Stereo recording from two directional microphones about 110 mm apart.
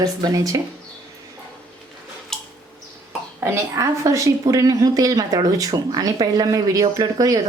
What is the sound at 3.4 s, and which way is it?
A woman's voice, 30° right (ahead or behind).